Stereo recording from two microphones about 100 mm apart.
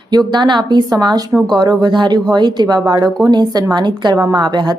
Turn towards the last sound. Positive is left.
turn(degrees=-45)  # may be behind; listen again after turning